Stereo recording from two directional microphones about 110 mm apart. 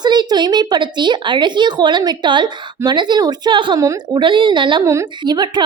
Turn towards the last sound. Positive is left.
turn(degrees=-40)  # may be behind; listen again after turning